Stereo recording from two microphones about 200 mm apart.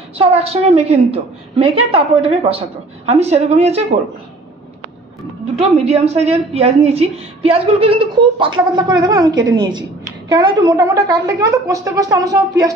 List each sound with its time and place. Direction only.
0.2 s a woman's voice: 30° right (ahead or behind)
5.6 s a woman's voice: 30° right (ahead or behind)